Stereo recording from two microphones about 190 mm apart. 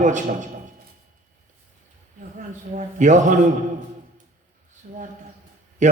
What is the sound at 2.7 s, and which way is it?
Speech, 40° right (ahead or behind).